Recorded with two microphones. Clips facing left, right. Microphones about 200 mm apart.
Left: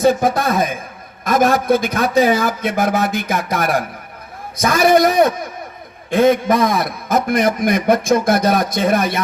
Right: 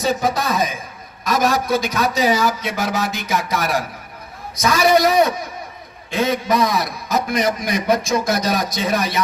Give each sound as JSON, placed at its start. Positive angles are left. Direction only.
{"t": 0.0, "sound": "a man's voice", "side_deg": 55}